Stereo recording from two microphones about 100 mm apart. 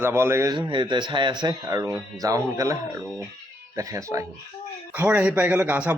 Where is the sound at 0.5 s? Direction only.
50° right (ahead or behind).